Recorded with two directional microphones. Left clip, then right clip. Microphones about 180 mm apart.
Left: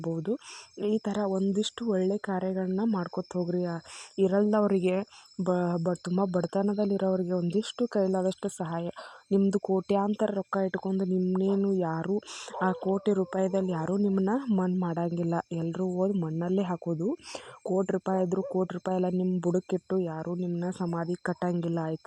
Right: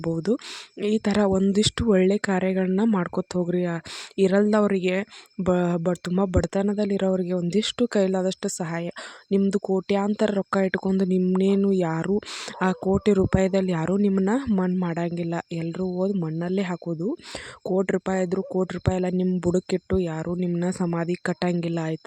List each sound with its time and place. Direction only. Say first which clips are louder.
0.0 s speech: right 7 dB; 25° right (ahead or behind)
1.0 s speech: right 7 dB; 30° right (ahead or behind)
4.8 s speech: right 3 dB; 10° right (ahead or behind)
5.4 s speech: right 5 dB; 25° right (ahead or behind)
8.4 s speech: right 4 dB; 30° right (ahead or behind)
9.3 s speech: right 3 dB; 15° right (ahead or behind)